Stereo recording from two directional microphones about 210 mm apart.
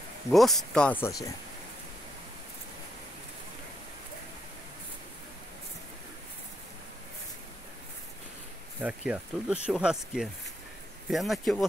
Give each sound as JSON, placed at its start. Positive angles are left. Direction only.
{"t": 0.3, "sound": "speech", "side_deg": 0}
{"t": 8.8, "sound": "speech", "side_deg": -5}